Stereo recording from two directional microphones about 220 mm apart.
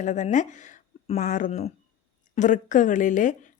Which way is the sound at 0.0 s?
35° left (ahead or behind).